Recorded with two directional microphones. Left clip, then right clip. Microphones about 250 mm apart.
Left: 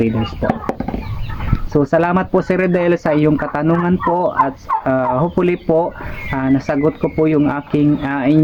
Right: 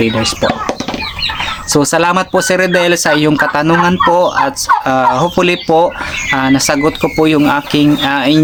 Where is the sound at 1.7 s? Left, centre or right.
Centre.